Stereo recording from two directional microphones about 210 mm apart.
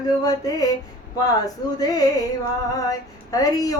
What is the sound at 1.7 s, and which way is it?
Child singing, 15° left (ahead or behind).